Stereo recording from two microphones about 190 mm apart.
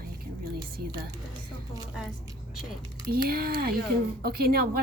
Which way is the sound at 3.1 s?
55° right (ahead or behind).